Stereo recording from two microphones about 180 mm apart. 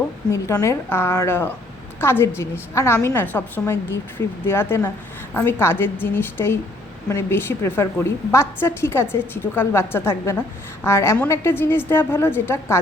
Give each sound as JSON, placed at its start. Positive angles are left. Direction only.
{"t": 0.3, "sound": "a woman's voice", "side_deg": 15}